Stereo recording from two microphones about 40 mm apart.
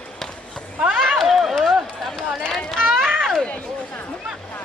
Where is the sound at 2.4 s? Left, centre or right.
Centre.